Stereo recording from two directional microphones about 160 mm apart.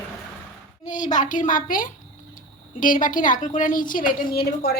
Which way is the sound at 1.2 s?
55° left (ahead or behind).